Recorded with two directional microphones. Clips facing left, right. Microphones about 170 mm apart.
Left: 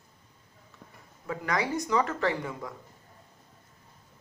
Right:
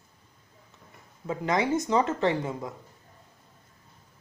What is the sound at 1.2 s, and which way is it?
Speech, 20° right (ahead or behind).